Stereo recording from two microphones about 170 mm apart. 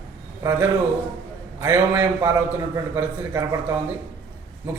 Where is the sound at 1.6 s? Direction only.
15° right (ahead or behind).